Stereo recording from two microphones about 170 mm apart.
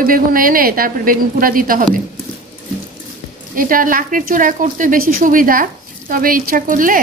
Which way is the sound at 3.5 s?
55° right (ahead or behind).